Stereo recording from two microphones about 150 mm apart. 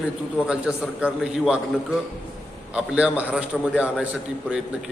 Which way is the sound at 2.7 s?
10° right (ahead or behind).